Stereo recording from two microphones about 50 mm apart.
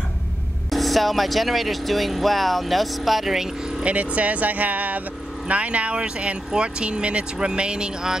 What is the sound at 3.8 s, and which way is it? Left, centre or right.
Speech, right.